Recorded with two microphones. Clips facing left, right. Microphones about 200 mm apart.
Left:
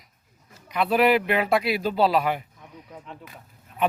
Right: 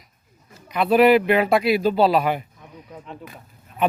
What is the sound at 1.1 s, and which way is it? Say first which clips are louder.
Speech: right 5 dB; 40° right (ahead or behind).